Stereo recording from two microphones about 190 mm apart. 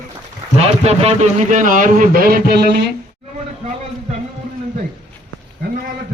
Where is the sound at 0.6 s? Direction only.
35° right (ahead or behind); by 2.8 s 55° right (ahead or behind).